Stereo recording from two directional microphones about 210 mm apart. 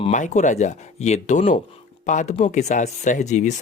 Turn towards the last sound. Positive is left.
turn(degrees=35)  # may be behind; listen again after turning